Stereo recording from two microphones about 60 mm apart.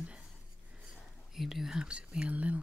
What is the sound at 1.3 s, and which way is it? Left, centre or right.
Speech, centre.